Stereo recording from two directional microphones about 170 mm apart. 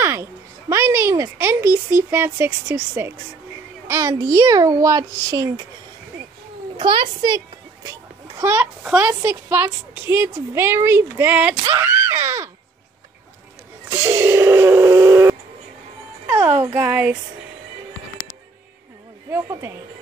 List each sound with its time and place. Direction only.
0.0 s a woman's voice: 15° right (ahead or behind)
6.8 s a child's voice: 30° right (ahead or behind)
7.9 s a woman's voice: 15° right (ahead or behind)
13.8 s speech: 15° right (ahead or behind)
16.7 s a woman's voice: 10° right (ahead or behind)
19.3 s a woman's voice: 15° right (ahead or behind)